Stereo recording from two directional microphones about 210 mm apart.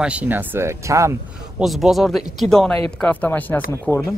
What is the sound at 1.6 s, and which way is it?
Speech, centre (ahead or behind).